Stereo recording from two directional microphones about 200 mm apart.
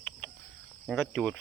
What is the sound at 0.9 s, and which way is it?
Speech, 5° left (ahead or behind).